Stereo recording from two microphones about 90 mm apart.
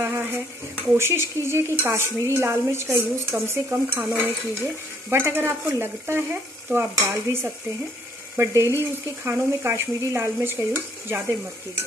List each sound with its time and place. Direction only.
0.0 s dishes: 25° right (ahead or behind)
0.9 s stir: 30° right (ahead or behind)
8.4 s speech: 30° right (ahead or behind)
9.2 s stir: 25° right (ahead or behind)